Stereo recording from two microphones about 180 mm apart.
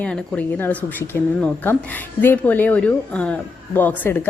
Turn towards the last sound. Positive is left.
turn(degrees=10)  # may be behind; listen again after turning